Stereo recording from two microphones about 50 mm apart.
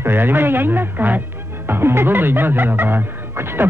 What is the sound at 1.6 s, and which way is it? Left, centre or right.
Music, right.